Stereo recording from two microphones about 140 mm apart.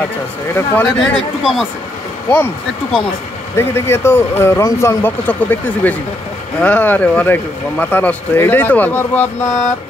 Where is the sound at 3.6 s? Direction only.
20° left (ahead or behind).